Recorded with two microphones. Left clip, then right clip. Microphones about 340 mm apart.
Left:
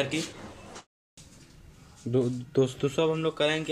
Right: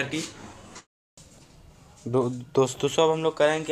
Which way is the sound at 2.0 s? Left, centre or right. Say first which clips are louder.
Right 2 dB; right.